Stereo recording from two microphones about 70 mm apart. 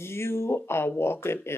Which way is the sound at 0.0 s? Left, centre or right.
Left.